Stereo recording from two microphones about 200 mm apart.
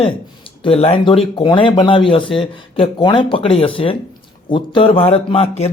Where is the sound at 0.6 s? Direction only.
30° left (ahead or behind).